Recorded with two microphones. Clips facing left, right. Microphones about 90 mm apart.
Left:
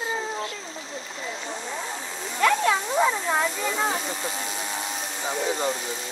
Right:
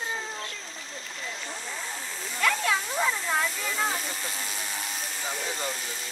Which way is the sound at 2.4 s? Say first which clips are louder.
Left 5 dB; 5° left (ahead or behind).